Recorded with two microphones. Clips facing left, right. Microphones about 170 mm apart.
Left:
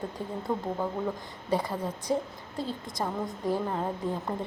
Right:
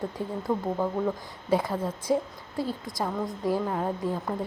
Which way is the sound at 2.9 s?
20° left (ahead or behind).